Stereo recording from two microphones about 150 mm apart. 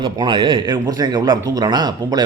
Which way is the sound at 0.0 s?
30° right (ahead or behind).